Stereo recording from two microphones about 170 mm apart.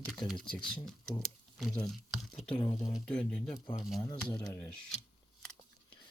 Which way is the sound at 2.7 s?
20° left (ahead or behind).